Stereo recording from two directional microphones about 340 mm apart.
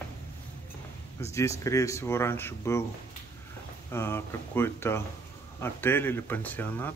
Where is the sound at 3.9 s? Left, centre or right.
Centre.